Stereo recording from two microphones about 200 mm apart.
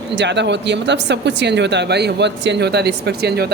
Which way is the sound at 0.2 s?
60° right (ahead or behind).